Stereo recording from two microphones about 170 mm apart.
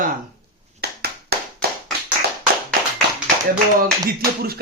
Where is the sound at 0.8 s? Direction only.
70° right (ahead or behind).